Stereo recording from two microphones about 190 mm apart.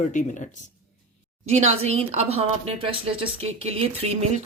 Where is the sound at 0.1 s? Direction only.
40° left (ahead or behind).